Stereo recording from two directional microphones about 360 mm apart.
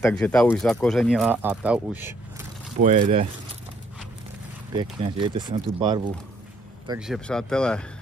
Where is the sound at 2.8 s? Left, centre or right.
Right.